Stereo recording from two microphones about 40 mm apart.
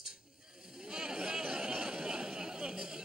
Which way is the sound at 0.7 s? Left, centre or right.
Centre.